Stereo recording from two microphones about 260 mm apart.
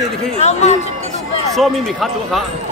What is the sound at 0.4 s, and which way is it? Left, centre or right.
Speech, left.